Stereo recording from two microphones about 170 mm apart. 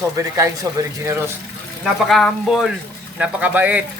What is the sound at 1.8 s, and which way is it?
A man's voice, centre (ahead or behind).